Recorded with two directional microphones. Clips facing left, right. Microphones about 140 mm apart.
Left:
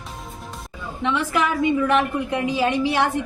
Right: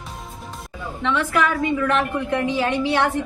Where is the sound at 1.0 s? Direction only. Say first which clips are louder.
Right 1 dB; 15° left (ahead or behind).